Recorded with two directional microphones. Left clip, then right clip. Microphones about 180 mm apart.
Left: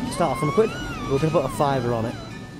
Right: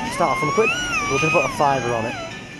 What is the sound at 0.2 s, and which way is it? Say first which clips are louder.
Speech: right 3 dB; 25° left (ahead or behind).